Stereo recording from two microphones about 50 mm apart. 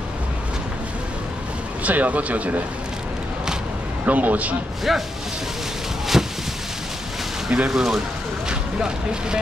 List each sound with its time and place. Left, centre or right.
1.8 s speech: right
4.0 s a man's voice: right
4.9 s speech: centre
6.1 s a sound: centre
7.6 s speech: centre